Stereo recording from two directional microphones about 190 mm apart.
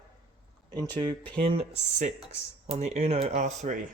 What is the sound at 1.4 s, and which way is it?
Speech, 35° right (ahead or behind).